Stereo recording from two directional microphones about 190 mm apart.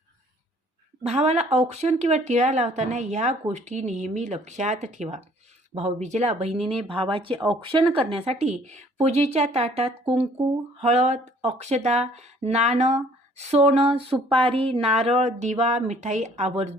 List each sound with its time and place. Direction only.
1.0 s speech: 35° right (ahead or behind)